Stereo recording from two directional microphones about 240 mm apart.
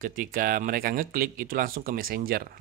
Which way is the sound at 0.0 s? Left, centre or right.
Right.